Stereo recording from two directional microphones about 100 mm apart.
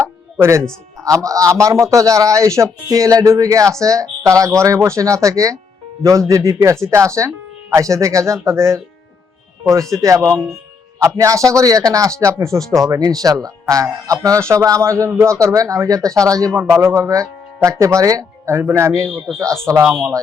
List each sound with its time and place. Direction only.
0.0 s music: 25° right (ahead or behind)
1.0 s speech: 35° right (ahead or behind)
9.9 s a man's voice: 35° right (ahead or behind)